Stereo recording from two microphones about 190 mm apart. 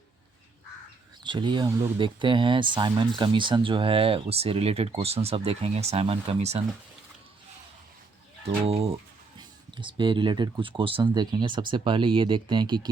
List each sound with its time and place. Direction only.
1.2 s speech: 25° right (ahead or behind)
8.4 s bird: 30° right (ahead or behind)
9.4 s speech: 25° right (ahead or behind)